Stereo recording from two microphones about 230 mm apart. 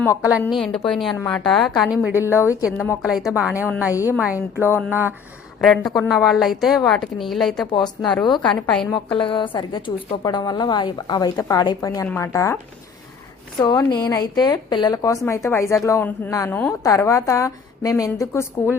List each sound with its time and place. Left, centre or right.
0.4 s a woman's voice: centre
2.3 s a woman's voice: centre
3.0 s a woman's voice: centre
3.9 s a woman's voice: centre
4.2 s a woman's voice: centre
5.6 s a woman's voice: centre
8.9 s a woman's voice: left
13.6 s a woman's voice: centre